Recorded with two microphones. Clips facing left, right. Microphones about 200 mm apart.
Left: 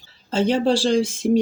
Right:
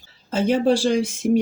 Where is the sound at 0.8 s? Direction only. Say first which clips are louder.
Left 1 dB; 15° right (ahead or behind).